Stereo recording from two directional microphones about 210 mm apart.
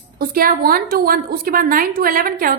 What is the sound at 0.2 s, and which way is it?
A woman's voice, 45° right (ahead or behind).